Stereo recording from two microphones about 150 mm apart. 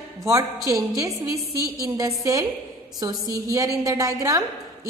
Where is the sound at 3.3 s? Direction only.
20° right (ahead or behind).